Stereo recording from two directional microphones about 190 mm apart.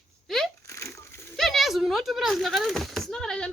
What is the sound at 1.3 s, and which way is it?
Speech, centre (ahead or behind).